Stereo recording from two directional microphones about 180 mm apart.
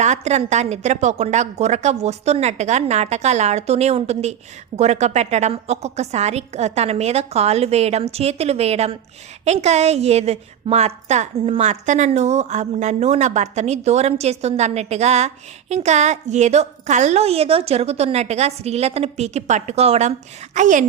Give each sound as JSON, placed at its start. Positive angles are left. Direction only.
{"t": 0.0, "sound": "a woman's voice", "side_deg": -40}